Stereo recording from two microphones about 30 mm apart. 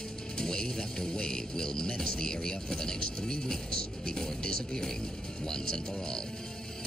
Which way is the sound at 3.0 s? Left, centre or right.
Left.